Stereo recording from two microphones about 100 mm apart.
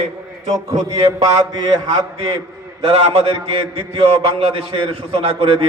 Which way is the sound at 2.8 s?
85° right.